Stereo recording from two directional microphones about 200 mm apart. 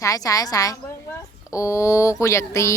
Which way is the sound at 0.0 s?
15° left (ahead or behind).